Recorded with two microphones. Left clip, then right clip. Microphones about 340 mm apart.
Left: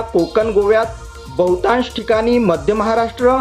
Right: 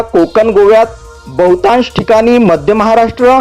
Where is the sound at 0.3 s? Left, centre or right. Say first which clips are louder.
Right 8 dB; right.